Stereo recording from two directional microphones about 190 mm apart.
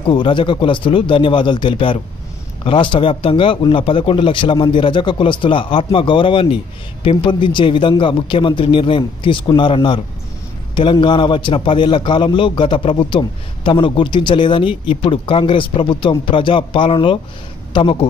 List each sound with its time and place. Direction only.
0.0 s a man's voice: 25° left (ahead or behind)